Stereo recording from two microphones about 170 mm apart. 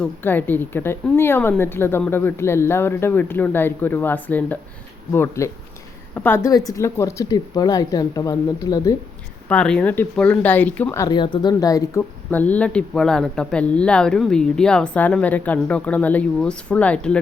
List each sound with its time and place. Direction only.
0.0 s speech: 10° left (ahead or behind)
9.5 s speech: 5° left (ahead or behind)
11.0 s speech: 25° left (ahead or behind); by 17.2 s 5° left (ahead or behind)